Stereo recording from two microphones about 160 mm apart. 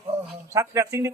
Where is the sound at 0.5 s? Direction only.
20° right (ahead or behind).